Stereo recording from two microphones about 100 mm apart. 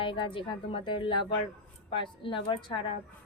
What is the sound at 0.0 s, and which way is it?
A woman's voice, 55° left (ahead or behind).